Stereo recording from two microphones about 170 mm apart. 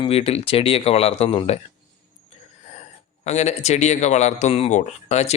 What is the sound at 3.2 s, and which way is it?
Speech, 40° left (ahead or behind).